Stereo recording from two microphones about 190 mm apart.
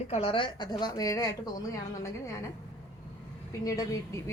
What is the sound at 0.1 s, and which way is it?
A woman's voice, 30° left (ahead or behind).